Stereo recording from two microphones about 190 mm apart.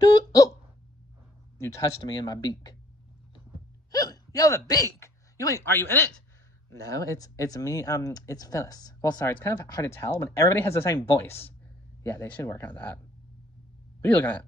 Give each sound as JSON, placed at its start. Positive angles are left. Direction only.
{"t": 0.0, "sound": "a sound", "side_deg": 20}
{"t": 1.6, "sound": "speech", "side_deg": 20}
{"t": 3.9, "sound": "speech", "side_deg": 20}
{"t": 14.0, "sound": "speech", "side_deg": 10}